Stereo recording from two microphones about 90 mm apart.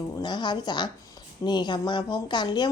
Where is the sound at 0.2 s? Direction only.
55° left (ahead or behind).